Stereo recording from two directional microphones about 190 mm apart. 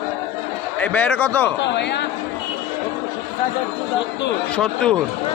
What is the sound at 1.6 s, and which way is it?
Speech, 65° left (ahead or behind).